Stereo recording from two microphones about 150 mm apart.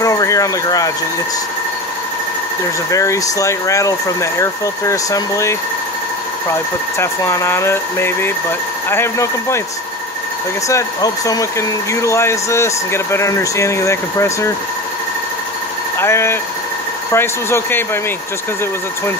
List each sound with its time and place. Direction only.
0.0 s a sound: 20° left (ahead or behind)
2.9 s speech: 20° left (ahead or behind)
7.0 s speech: 20° left (ahead or behind)
10.7 s speech: 20° left (ahead or behind)
16.0 s speech: 15° left (ahead or behind)